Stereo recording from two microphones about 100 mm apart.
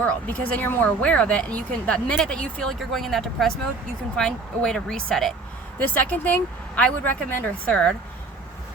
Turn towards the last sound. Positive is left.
turn(degrees=10)  # may be behind; listen again after turning